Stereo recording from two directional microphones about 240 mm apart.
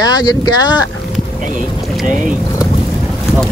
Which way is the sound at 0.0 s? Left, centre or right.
Centre.